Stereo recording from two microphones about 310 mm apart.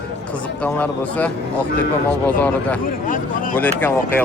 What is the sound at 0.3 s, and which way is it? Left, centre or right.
Speech, centre.